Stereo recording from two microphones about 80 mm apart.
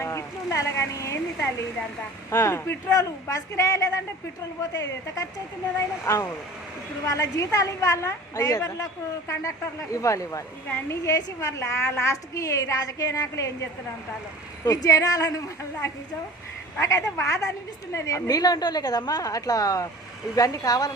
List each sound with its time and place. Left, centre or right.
0.0 s a woman's voice: left
6.1 s a woman's voice: left
14.6 s a woman's voice: left
16.8 s a woman's voice: left